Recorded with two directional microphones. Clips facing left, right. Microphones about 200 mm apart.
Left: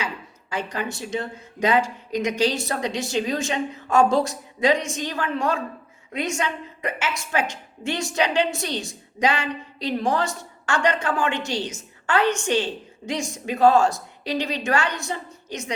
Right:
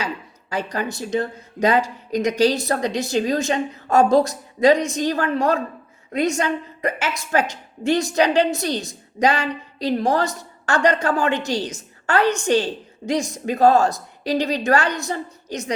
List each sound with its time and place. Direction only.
0.5 s a woman's voice: 40° right (ahead or behind)